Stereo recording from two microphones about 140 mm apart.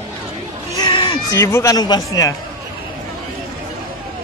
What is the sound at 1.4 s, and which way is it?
Speech, 20° left (ahead or behind).